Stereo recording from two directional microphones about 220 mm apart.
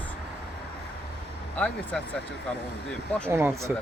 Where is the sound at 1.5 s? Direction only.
5° left (ahead or behind).